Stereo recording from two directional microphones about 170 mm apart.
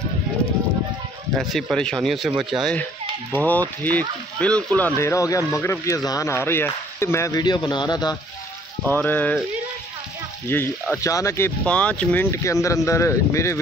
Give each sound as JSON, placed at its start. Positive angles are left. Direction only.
{"t": 1.3, "sound": "speech", "side_deg": 0}
{"t": 8.8, "sound": "speech", "side_deg": 10}
{"t": 10.5, "sound": "speech", "side_deg": 15}